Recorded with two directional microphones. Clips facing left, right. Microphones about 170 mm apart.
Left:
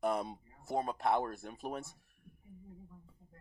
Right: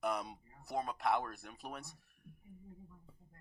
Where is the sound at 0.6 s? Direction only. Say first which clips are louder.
Left 3 dB; 30° left (ahead or behind).